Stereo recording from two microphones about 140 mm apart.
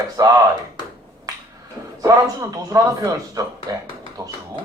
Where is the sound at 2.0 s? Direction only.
25° right (ahead or behind).